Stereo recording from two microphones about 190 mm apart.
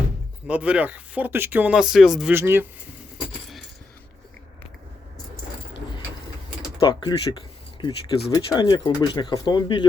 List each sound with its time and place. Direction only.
0.4 s speech: 5° right (ahead or behind)
2.3 s speech: 10° right (ahead or behind)
6.7 s speech: 20° left (ahead or behind)